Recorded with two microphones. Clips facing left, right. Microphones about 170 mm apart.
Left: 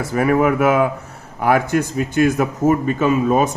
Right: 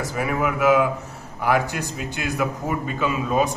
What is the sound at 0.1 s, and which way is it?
Speech, 55° left (ahead or behind).